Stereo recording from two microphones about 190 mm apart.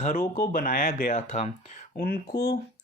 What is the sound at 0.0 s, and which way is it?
Speech, 45° left (ahead or behind).